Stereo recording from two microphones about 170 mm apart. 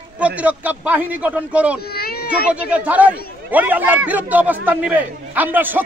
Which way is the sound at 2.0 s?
65° left (ahead or behind).